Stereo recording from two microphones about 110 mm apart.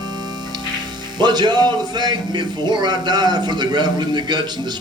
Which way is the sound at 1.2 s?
40° right (ahead or behind).